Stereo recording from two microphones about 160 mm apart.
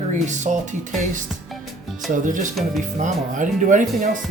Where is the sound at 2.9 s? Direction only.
50° right (ahead or behind).